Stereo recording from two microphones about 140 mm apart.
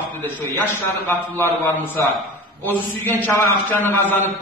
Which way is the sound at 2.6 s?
15° left (ahead or behind).